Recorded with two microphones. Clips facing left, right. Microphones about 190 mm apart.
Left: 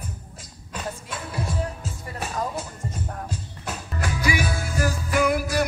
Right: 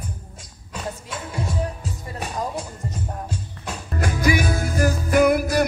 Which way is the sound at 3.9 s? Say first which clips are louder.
Right 5 dB; 45° right (ahead or behind).